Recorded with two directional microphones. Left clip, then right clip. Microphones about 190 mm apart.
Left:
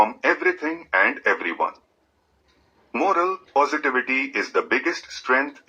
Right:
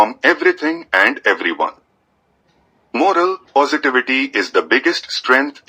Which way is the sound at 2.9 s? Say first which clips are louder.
Right 6 dB; 50° right (ahead or behind).